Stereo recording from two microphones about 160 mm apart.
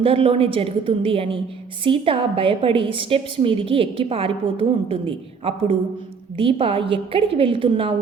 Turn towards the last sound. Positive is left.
turn(degrees=-35)  # may be behind; listen again after turning